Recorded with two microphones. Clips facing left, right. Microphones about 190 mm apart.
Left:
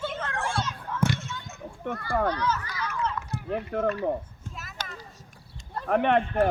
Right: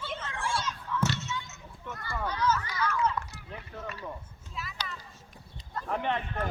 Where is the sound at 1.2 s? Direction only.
55° left (ahead or behind).